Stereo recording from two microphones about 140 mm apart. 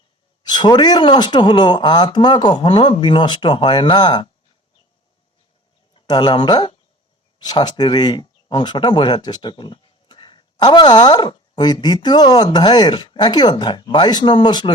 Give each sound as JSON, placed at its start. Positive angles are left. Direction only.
{"t": 0.4, "sound": "speech", "side_deg": 30}
{"t": 5.9, "sound": "speech", "side_deg": 35}